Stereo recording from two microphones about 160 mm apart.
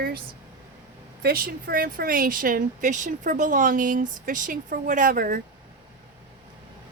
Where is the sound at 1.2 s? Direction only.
70° right (ahead or behind).